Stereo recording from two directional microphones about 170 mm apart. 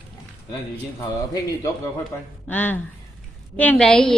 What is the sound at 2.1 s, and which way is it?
A woman's voice, 15° left (ahead or behind).